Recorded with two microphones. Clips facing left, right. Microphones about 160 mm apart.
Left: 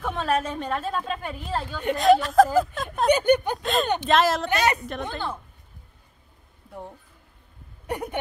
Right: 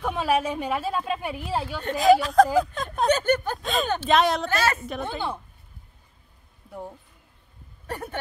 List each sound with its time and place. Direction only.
0.0 s a woman's voice: 10° right (ahead or behind)
3.1 s speech: 15° left (ahead or behind)
3.5 s speech: centre (ahead or behind)
6.7 s speech: centre (ahead or behind)
7.8 s speech: 15° left (ahead or behind)